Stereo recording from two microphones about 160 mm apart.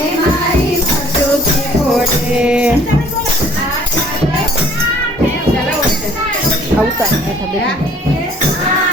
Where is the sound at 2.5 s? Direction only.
10° right (ahead or behind).